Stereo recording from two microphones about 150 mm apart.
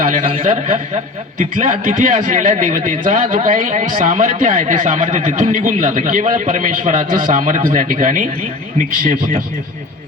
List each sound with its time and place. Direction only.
0.0 s a man's voice: 60° right (ahead or behind)